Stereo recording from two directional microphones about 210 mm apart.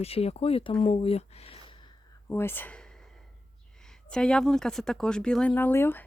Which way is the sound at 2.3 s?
10° left (ahead or behind).